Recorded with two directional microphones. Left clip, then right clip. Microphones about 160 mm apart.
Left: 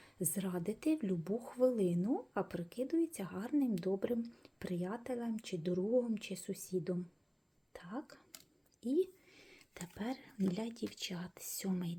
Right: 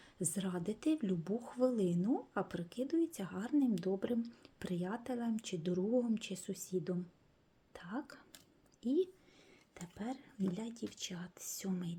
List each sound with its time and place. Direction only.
0.0 s a woman's voice: centre (ahead or behind)
7.7 s whispering: 5° right (ahead or behind)
8.8 s speech: centre (ahead or behind)
9.4 s speech: 15° left (ahead or behind)